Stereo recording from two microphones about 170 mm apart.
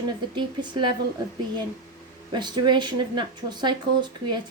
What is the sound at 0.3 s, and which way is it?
Speech, 25° right (ahead or behind).